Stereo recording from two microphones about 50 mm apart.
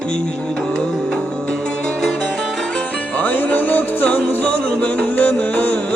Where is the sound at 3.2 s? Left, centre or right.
Left.